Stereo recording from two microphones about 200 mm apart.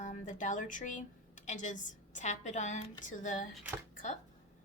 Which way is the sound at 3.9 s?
40° left (ahead or behind).